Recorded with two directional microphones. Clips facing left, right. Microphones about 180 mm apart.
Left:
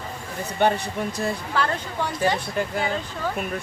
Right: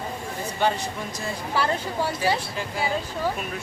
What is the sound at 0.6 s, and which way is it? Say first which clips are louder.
Speech: left 3 dB; 60° left (ahead or behind).